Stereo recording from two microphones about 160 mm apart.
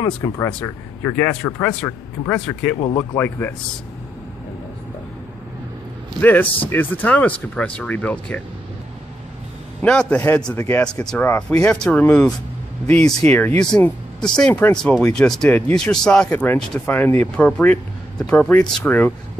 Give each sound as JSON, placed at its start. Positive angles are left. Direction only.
{"t": 0.0, "sound": "a man's voice", "side_deg": 20}
{"t": 6.2, "sound": "a man's voice", "side_deg": 10}
{"t": 9.8, "sound": "a man's voice", "side_deg": 5}